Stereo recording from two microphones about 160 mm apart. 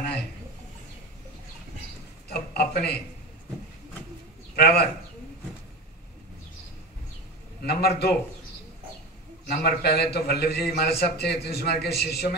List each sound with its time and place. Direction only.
2.2 s a sound: 90° left
4.6 s speech: 85° left
7.6 s a man's voice: 90° left
9.5 s a man's voice: 75° left (ahead or behind)